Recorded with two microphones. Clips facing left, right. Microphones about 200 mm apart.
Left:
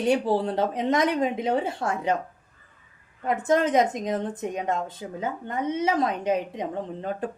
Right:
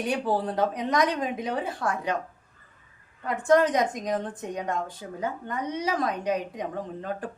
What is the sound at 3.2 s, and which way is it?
A woman's voice, 20° left (ahead or behind).